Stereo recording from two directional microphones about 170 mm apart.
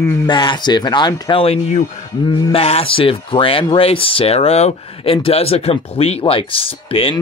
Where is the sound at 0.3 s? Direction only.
25° left (ahead or behind).